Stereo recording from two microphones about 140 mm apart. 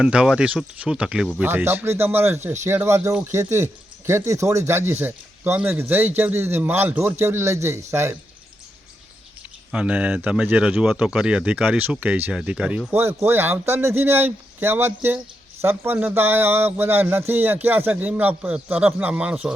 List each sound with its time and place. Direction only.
0.0 s speech: 5° right (ahead or behind)
9.7 s speech: 10° right (ahead or behind)